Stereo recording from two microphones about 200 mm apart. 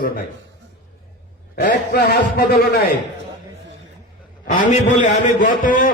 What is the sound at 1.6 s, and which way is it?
A man's voice, 50° left (ahead or behind).